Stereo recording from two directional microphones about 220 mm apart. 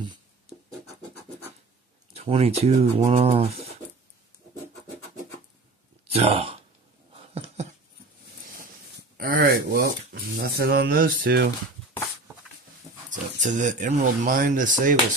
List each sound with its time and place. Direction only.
2.1 s speech: 25° right (ahead or behind)
6.1 s speech: 25° right (ahead or behind)
7.2 s a sound: 30° right (ahead or behind)
9.1 s a sound: 40° right (ahead or behind)
10.3 s speech: 45° right (ahead or behind)
13.1 s speech: 35° right (ahead or behind)